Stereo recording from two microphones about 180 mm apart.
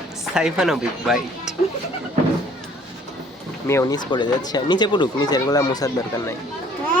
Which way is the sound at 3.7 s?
15° left (ahead or behind).